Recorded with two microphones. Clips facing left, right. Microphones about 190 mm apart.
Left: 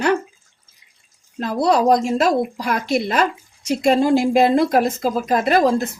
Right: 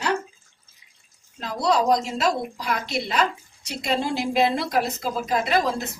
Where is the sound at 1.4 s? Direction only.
55° left (ahead or behind).